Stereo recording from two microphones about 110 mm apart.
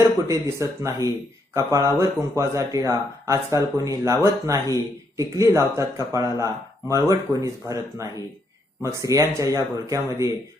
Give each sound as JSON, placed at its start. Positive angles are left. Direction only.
{"t": 0.3, "sound": "speech", "side_deg": -25}